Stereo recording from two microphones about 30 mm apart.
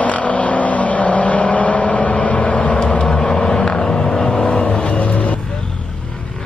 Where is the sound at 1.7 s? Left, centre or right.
Left.